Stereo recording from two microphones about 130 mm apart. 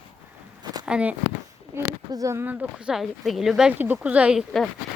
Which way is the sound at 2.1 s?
25° right (ahead or behind).